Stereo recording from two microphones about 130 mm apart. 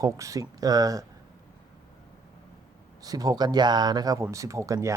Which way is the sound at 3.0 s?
30° right (ahead or behind).